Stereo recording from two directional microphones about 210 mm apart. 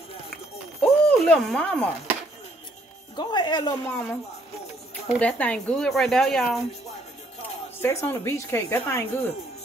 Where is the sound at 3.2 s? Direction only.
20° left (ahead or behind).